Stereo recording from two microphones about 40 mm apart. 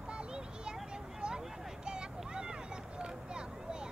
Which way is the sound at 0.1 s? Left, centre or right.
Right.